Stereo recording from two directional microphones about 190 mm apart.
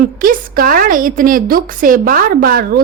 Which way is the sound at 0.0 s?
50° right (ahead or behind).